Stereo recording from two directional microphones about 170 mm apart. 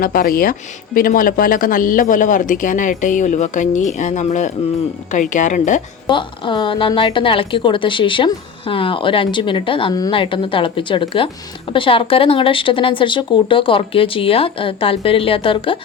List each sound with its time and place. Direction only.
0.0 s speech: 60° left (ahead or behind)
6.1 s a woman's voice: 30° left (ahead or behind)